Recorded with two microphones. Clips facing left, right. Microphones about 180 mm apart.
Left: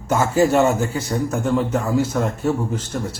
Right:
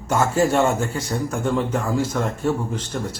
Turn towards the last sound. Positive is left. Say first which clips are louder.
# left 2 dB
turn(degrees=5)  # may be behind; listen again after turning